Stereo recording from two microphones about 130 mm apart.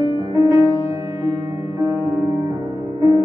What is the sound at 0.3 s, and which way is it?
Music, 30° right (ahead or behind).